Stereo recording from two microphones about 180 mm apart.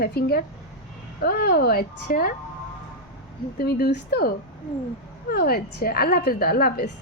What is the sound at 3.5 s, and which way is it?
Speech, 55° left (ahead or behind).